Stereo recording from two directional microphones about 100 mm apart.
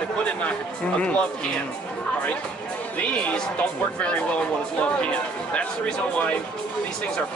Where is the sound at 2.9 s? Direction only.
10° left (ahead or behind).